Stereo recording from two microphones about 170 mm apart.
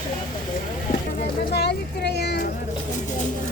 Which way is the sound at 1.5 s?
75° left (ahead or behind).